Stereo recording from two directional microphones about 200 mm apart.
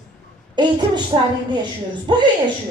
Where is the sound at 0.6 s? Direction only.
20° right (ahead or behind).